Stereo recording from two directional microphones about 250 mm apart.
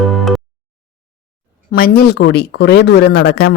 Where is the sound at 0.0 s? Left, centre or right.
Centre.